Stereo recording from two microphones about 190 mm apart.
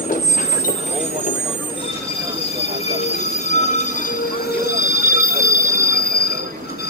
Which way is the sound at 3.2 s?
40° left (ahead or behind).